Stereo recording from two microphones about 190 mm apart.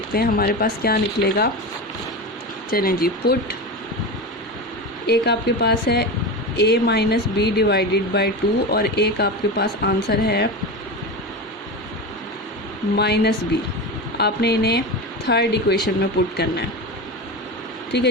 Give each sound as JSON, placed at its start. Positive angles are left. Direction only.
{"t": 0.1, "sound": "speech", "side_deg": 50}
{"t": 2.6, "sound": "speech", "side_deg": 50}
{"t": 5.0, "sound": "speech", "side_deg": 60}
{"t": 13.0, "sound": "speech", "side_deg": 60}
{"t": 17.9, "sound": "speech", "side_deg": 60}